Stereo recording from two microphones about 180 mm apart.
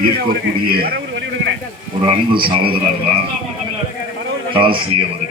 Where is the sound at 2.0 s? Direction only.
30° right (ahead or behind).